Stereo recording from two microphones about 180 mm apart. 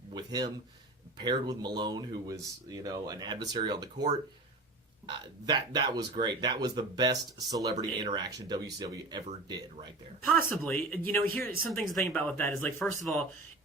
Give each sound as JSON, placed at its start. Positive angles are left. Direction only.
{"t": 0.1, "sound": "speech", "side_deg": -20}
{"t": 10.2, "sound": "speech", "side_deg": 10}